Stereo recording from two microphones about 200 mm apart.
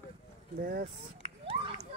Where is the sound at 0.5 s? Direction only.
50° right (ahead or behind).